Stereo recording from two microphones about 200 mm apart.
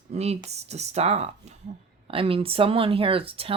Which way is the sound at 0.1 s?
30° right (ahead or behind).